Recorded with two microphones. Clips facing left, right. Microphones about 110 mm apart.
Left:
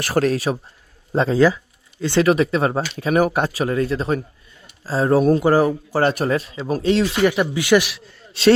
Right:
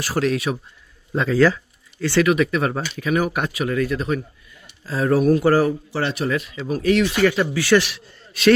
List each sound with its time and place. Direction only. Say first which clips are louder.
0.0 s speech: left 3 dB; 60° left (ahead or behind)
0.3 s speech: left 2 dB; 35° left (ahead or behind)
1.4 s a sound: right 2 dB; 15° left (ahead or behind)
2.2 s speech: left 4 dB; 30° left (ahead or behind)
5.4 s speech: left 1 dB; 20° left (ahead or behind)
5.9 s speech: left 4 dB; 45° left (ahead or behind); by 7.9 s 15° left (ahead or behind)
7.9 s a man's voice: left 1 dB; centre (ahead or behind)
8.3 s a man's voice: left 1 dB; 25° left (ahead or behind)